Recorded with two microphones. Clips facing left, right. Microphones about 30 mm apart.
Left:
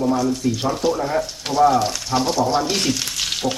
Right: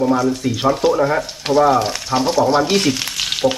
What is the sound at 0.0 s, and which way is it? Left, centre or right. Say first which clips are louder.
Speech: right 3 dB; right.